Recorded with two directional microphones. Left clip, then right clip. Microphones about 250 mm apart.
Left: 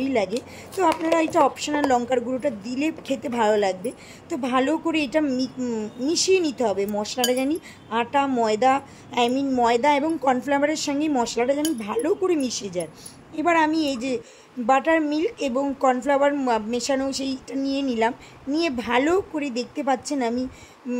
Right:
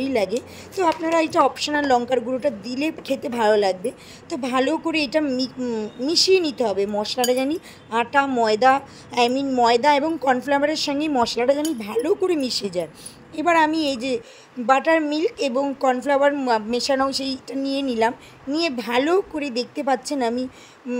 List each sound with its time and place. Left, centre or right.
0.0 s a woman's voice: centre